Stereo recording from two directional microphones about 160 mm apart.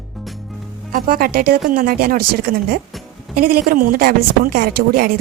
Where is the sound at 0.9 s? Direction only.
65° right (ahead or behind).